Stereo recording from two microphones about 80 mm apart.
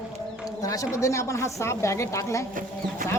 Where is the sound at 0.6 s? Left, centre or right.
Left.